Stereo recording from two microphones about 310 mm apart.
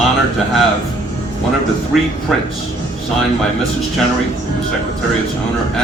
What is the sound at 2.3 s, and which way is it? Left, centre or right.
Speech, centre.